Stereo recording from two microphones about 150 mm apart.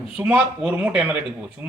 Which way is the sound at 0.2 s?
5° right (ahead or behind).